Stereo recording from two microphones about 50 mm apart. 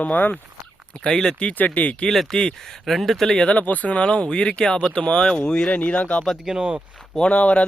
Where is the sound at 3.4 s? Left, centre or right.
Left.